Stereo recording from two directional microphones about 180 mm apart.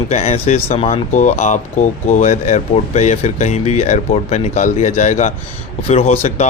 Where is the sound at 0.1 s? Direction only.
35° left (ahead or behind).